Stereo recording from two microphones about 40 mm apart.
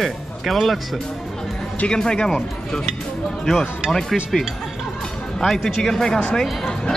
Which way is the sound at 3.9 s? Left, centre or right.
Centre.